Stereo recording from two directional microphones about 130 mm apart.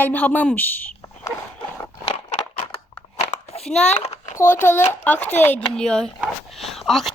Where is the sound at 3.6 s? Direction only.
5° left (ahead or behind).